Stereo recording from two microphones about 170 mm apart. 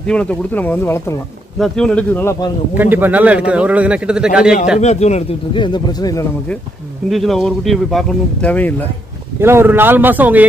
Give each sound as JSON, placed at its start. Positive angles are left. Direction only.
{"t": 0.0, "sound": "speech", "side_deg": 5}
{"t": 1.6, "sound": "speech", "side_deg": 5}
{"t": 2.8, "sound": "a man's voice", "side_deg": -10}
{"t": 4.7, "sound": "speech", "side_deg": 40}
{"t": 5.6, "sound": "speech", "side_deg": 25}
{"t": 7.1, "sound": "speech", "side_deg": 0}
{"t": 9.4, "sound": "a man's voice", "side_deg": -15}